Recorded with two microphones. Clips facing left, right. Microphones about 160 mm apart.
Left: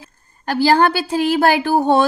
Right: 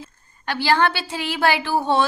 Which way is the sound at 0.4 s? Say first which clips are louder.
Left 5 dB; 40° left (ahead or behind).